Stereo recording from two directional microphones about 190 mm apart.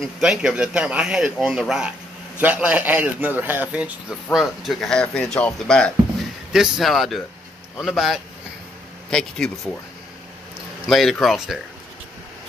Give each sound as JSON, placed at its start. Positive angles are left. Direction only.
{"t": 0.0, "sound": "speech", "side_deg": -5}
{"t": 10.9, "sound": "speech", "side_deg": 0}